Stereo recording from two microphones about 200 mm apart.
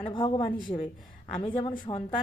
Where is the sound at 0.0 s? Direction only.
25° left (ahead or behind).